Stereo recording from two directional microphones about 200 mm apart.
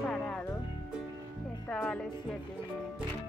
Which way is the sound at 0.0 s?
5° left (ahead or behind).